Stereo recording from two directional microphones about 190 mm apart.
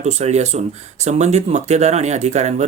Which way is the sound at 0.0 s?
35° right (ahead or behind).